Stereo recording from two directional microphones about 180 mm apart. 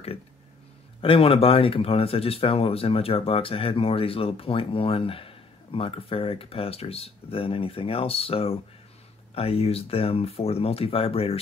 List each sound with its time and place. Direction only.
1.0 s speech: 30° left (ahead or behind)